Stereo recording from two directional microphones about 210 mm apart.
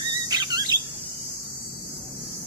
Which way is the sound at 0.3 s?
20° right (ahead or behind).